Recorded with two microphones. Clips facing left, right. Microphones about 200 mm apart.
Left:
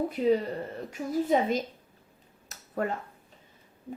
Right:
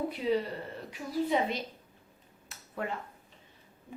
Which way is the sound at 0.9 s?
45° left (ahead or behind).